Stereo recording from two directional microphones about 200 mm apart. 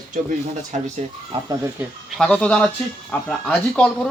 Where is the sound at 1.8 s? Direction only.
10° right (ahead or behind).